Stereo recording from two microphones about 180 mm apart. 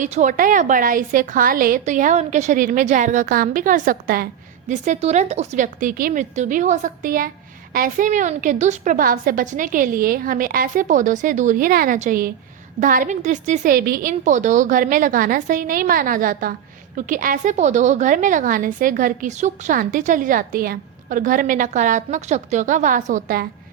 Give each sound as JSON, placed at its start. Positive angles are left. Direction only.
{"t": 0.0, "sound": "a woman's voice", "side_deg": -45}
{"t": 4.7, "sound": "a woman's voice", "side_deg": -40}